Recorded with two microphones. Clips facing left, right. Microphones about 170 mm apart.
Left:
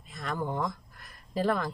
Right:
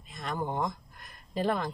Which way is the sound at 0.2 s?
20° right (ahead or behind).